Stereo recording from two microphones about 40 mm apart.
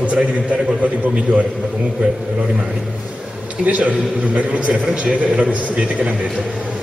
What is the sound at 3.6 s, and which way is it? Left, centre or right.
A man's voice, right.